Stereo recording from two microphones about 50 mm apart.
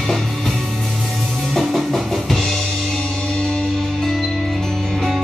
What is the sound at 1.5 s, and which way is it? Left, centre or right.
Music, centre.